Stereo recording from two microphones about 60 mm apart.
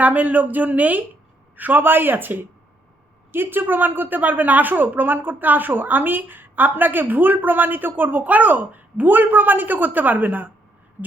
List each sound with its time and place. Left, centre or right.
0.0 s a woman's voice: right